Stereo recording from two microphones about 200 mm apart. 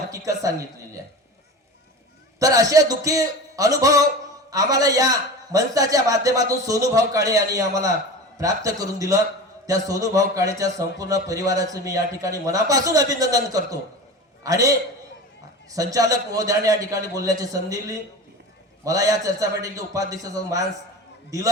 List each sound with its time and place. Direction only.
0.1 s a man's voice: 15° right (ahead or behind)
2.4 s a man's voice: 15° right (ahead or behind)